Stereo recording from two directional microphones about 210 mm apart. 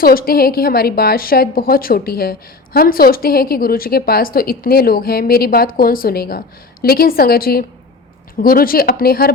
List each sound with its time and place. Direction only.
0.0 s a woman's voice: 45° left (ahead or behind)